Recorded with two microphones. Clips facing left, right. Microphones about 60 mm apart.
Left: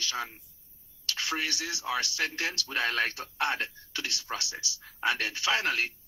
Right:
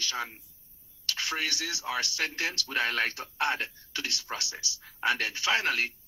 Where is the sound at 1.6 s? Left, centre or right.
Right.